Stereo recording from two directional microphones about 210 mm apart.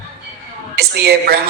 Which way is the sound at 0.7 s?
50° right (ahead or behind).